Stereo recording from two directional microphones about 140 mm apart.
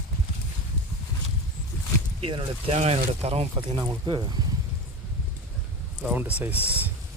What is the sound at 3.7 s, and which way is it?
Speech, 30° right (ahead or behind).